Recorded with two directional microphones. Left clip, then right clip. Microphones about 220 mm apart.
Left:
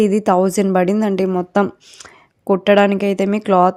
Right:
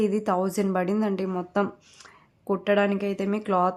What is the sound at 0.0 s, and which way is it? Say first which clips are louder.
A woman's voice: left 10 dB; 30° left (ahead or behind).